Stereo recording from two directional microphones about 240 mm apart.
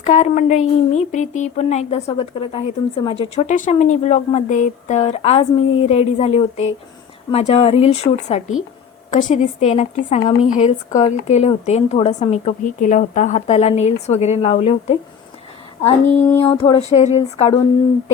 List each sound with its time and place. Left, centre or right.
0.0 s speech: left
15.8 s female singing: centre
16.6 s speech: left